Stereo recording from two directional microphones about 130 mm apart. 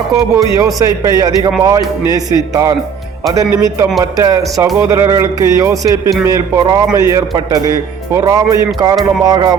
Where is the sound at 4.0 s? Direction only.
25° right (ahead or behind).